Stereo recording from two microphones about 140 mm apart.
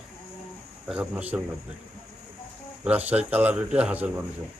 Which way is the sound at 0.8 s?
10° right (ahead or behind).